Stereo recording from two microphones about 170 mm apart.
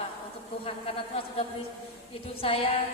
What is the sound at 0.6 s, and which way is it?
A woman's voice, 35° left (ahead or behind).